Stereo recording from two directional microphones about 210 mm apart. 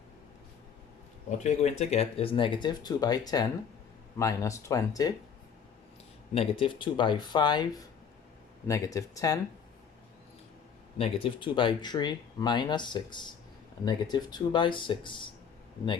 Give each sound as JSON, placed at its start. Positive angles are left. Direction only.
{"t": 1.5, "sound": "speech", "side_deg": 30}
{"t": 6.3, "sound": "speech", "side_deg": 25}
{"t": 10.9, "sound": "speech", "side_deg": 25}